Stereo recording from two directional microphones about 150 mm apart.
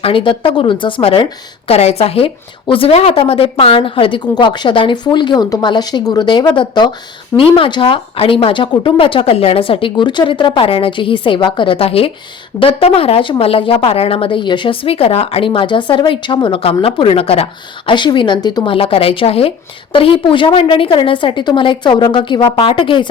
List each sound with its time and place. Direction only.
0.0 s a woman's voice: 35° left (ahead or behind)